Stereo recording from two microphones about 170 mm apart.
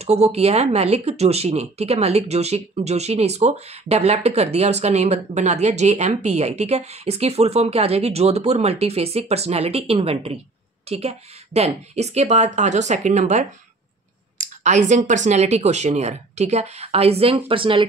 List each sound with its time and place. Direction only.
0.0 s speech: 40° right (ahead or behind)